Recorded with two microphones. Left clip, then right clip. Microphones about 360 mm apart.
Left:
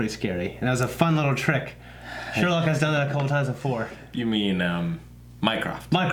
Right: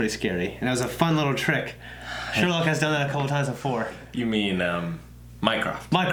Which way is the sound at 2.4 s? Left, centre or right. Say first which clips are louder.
Even; left.